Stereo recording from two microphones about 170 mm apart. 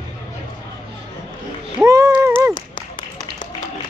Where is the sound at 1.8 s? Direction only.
20° right (ahead or behind).